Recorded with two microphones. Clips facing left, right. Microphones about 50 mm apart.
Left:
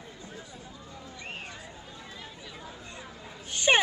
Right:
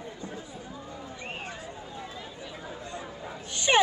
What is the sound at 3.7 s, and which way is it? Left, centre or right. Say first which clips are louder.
Speech: right 1 dB; left.